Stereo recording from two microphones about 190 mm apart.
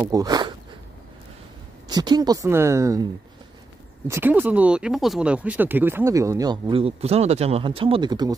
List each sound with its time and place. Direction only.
0.0 s a woman's voice: 20° right (ahead or behind)
1.9 s a woman's voice: 20° right (ahead or behind)
4.1 s speech: 10° right (ahead or behind)